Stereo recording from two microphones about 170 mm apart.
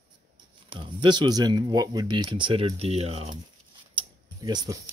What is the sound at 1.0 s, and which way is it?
Speech, 25° right (ahead or behind).